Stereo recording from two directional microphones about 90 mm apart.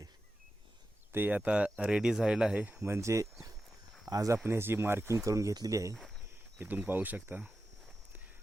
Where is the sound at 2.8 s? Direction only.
30° right (ahead or behind).